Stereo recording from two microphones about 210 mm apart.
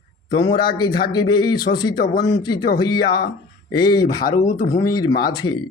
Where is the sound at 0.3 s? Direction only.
20° left (ahead or behind).